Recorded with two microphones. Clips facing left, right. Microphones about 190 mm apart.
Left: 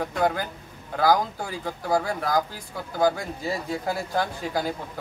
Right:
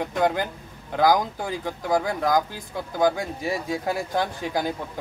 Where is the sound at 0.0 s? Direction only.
20° right (ahead or behind).